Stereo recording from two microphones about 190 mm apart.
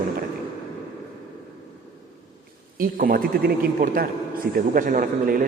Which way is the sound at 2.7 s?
50° right (ahead or behind).